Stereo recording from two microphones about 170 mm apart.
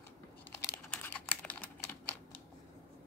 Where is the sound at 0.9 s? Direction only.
10° left (ahead or behind).